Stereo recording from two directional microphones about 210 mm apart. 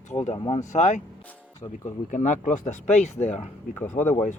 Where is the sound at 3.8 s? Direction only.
10° left (ahead or behind).